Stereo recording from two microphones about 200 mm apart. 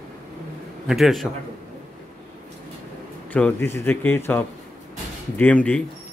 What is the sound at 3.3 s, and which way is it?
Speech, 5° left (ahead or behind).